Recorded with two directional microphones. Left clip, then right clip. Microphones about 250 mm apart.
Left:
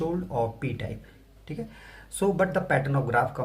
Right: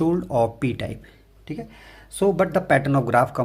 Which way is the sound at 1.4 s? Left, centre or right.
Right.